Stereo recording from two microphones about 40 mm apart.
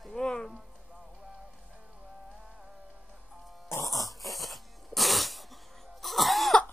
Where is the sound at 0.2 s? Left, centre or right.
Centre.